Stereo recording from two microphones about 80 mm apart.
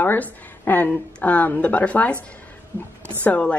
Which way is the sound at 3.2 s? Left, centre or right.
Centre.